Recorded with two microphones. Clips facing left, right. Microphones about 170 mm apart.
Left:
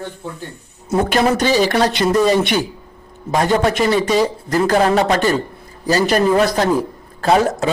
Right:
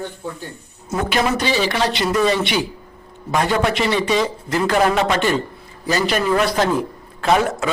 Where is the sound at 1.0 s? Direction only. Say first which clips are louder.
Left 3 dB; 45° left (ahead or behind).